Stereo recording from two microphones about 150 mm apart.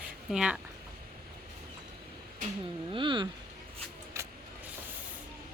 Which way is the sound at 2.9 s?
35° right (ahead or behind).